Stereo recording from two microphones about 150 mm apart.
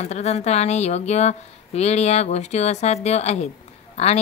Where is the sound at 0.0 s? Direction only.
50° left (ahead or behind).